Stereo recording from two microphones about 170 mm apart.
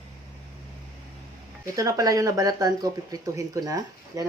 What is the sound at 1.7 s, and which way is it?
Speech, 20° right (ahead or behind).